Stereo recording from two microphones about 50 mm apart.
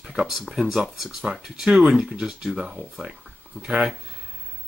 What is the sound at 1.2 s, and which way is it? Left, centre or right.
Speech, centre.